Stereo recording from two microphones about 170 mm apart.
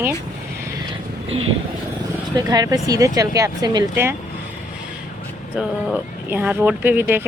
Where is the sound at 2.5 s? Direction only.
20° right (ahead or behind).